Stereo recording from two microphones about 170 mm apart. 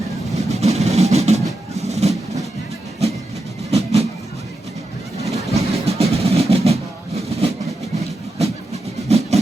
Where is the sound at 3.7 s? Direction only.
40° right (ahead or behind).